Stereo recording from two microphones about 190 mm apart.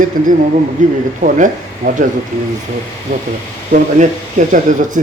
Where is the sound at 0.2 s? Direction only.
45° right (ahead or behind).